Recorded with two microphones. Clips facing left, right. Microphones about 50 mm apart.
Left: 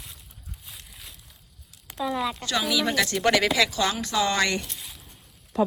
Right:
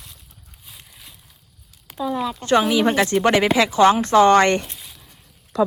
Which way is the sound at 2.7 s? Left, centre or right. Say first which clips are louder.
Right 7 dB; right.